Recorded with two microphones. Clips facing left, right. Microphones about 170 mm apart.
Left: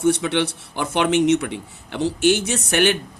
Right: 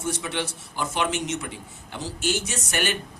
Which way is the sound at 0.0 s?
65° left (ahead or behind).